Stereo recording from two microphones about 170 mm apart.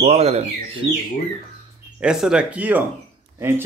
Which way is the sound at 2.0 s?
5° right (ahead or behind).